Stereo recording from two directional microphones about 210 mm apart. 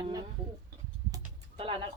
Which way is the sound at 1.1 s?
25° right (ahead or behind).